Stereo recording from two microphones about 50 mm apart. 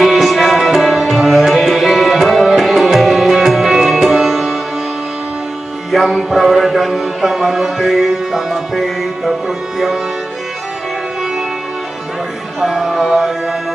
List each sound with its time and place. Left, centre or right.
0.0 s tabla: centre
5.9 s music: centre
12.5 s music: centre